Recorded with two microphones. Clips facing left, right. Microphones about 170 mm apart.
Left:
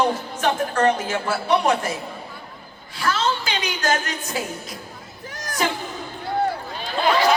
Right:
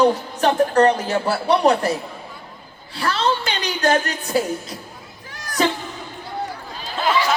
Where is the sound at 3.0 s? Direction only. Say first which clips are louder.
Right 2 dB; 35° right (ahead or behind).